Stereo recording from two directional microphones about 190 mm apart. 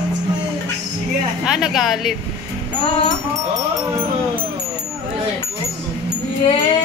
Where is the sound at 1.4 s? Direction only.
Centre (ahead or behind).